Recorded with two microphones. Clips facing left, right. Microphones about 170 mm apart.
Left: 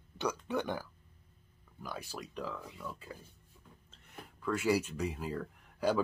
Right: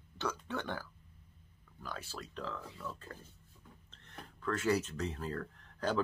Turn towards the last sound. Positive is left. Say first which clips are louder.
# left 3 dB
turn(degrees=10)  # may be behind; listen again after turning